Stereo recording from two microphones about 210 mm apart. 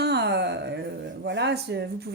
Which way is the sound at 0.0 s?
50° right (ahead or behind).